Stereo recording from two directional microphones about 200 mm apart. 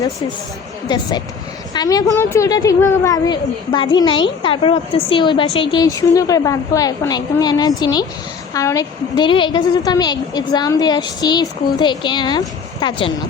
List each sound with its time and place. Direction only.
0.9 s a woman's voice: 20° left (ahead or behind)